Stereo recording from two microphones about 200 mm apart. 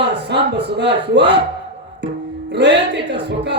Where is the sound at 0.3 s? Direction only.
60° right (ahead or behind).